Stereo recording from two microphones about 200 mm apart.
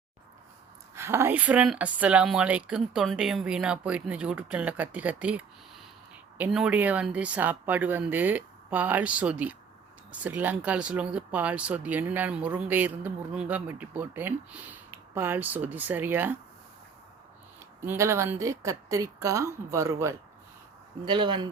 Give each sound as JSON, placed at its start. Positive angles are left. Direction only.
{"t": 0.9, "sound": "speech", "side_deg": -15}
{"t": 17.8, "sound": "speech", "side_deg": -15}